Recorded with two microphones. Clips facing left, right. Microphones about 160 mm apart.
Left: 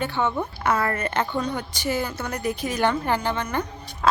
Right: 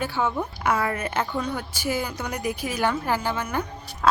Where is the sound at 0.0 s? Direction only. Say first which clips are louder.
Left 1 dB; 5° right (ahead or behind).